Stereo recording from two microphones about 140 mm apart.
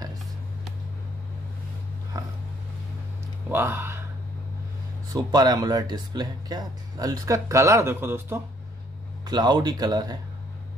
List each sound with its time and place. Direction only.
2.1 s dog: 25° right (ahead or behind)
3.4 s speech: 15° right (ahead or behind)
5.1 s speech: 30° right (ahead or behind)
9.2 s speech: 30° right (ahead or behind)